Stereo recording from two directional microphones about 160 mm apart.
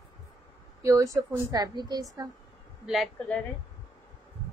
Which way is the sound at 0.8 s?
20° right (ahead or behind).